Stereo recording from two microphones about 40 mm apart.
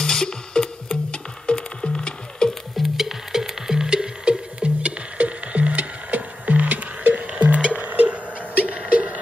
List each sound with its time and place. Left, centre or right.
0.0 s music: centre
2.7 s music: centre; by 9.2 s right